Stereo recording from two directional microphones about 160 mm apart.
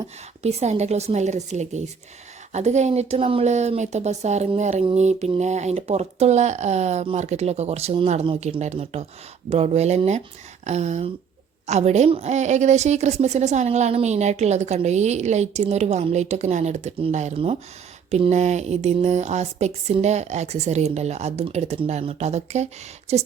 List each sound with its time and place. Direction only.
0.4 s a woman's voice: 45° right (ahead or behind)